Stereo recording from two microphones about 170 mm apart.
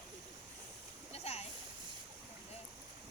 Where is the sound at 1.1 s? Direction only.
35° left (ahead or behind).